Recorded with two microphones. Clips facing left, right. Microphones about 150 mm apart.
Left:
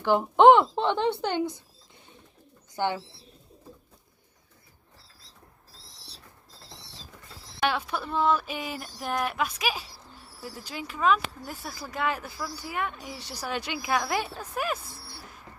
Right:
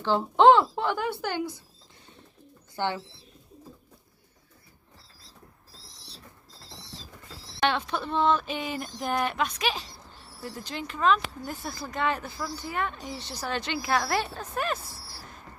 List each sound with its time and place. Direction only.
0.0 s speech: 15° left (ahead or behind)
2.7 s speech: 15° left (ahead or behind)
7.6 s speech: 5° left (ahead or behind)